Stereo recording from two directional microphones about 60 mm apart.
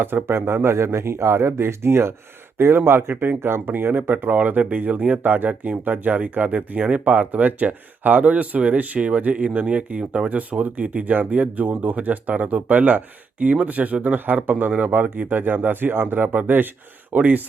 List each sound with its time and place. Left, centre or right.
0.0 s speech: right